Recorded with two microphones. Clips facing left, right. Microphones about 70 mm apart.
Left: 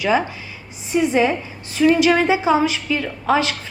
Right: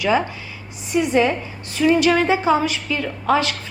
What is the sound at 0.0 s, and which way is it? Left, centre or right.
A woman's voice, centre.